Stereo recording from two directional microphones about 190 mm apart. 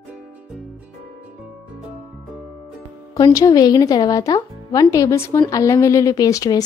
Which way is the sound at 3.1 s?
20° left (ahead or behind).